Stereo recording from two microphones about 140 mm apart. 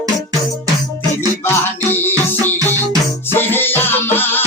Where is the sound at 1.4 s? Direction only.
15° left (ahead or behind).